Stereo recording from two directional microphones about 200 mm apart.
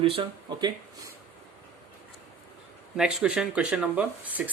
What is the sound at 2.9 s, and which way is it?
Speech, 5° right (ahead or behind).